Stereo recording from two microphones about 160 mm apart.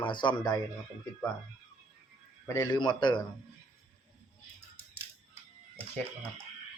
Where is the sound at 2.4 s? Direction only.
20° left (ahead or behind).